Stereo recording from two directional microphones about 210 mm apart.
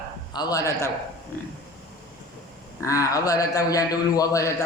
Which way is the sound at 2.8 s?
15° left (ahead or behind).